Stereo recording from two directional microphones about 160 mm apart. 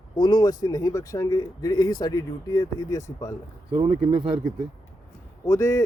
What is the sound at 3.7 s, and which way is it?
Speech, 40° right (ahead or behind).